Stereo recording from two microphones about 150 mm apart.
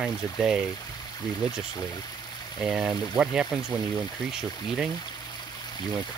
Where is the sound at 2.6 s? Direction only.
5° right (ahead or behind).